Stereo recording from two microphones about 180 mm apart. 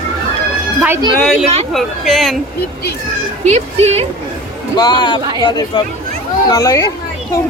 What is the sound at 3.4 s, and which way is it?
Speech, 35° right (ahead or behind).